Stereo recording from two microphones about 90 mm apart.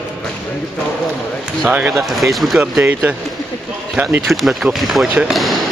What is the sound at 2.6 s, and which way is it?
Speech, 20° right (ahead or behind).